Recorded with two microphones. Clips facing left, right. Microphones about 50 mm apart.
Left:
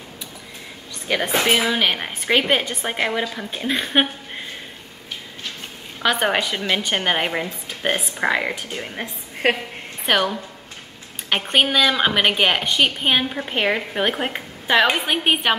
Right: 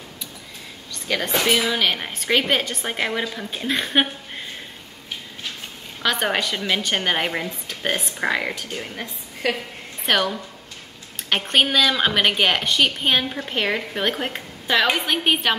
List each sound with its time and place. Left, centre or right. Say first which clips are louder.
1.0 s a woman's voice: left 2 dB; centre
6.0 s a woman's voice: left 2 dB; centre
9.0 s a woman's voice: left 5 dB; left
10.0 s a woman's voice: left 1 dB; centre